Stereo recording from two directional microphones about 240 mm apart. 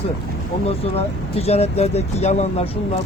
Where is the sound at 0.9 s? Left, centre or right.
Left.